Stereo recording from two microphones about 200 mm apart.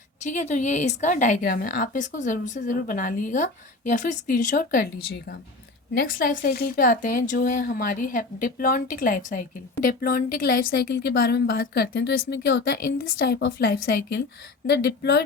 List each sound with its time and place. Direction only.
0.2 s a woman's voice: 35° left (ahead or behind)
6.0 s speech: 45° left (ahead or behind)